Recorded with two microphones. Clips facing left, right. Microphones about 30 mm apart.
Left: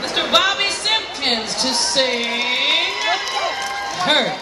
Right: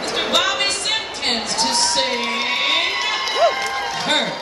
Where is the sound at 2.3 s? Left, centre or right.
Centre.